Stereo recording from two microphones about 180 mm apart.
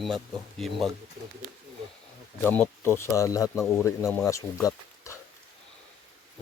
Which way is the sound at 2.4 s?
10° left (ahead or behind).